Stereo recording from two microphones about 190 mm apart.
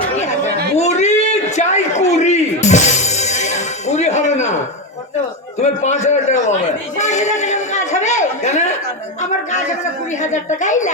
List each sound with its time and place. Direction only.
0.8 s a sound: 35° left (ahead or behind)
5.5 s a man's voice: 35° left (ahead or behind)
10.2 s a man's voice: 40° left (ahead or behind)